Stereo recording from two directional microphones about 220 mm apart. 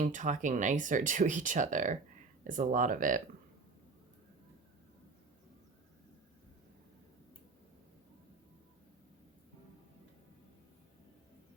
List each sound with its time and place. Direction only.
0.0 s speech: 35° right (ahead or behind)